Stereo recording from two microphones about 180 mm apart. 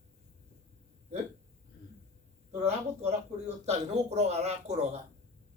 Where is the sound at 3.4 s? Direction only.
35° right (ahead or behind).